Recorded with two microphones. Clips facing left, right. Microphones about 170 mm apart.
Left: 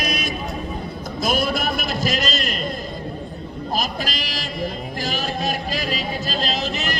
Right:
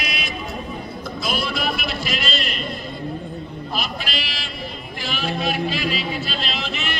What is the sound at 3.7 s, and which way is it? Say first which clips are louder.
Sheep: left 3 dB; 40° left (ahead or behind).